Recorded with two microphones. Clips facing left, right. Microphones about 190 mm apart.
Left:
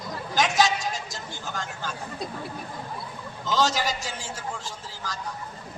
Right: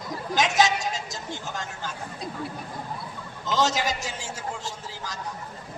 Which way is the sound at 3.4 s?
20° right (ahead or behind).